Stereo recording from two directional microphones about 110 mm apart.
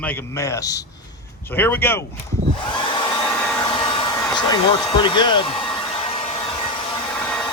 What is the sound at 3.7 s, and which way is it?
Hair dryer, 50° left (ahead or behind).